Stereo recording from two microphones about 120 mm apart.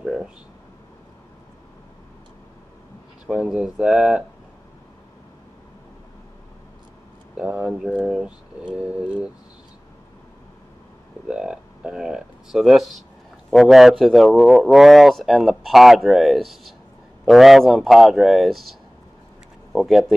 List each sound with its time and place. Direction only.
0.0 s speech: 5° right (ahead or behind)
3.3 s speech: 5° right (ahead or behind)
7.3 s speech: 5° right (ahead or behind)
11.2 s a man's voice: 5° right (ahead or behind)